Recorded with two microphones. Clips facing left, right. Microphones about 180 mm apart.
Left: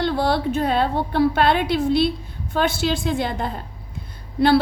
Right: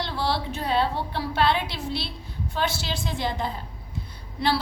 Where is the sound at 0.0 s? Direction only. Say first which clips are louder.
Left 7 dB; 50° left (ahead or behind).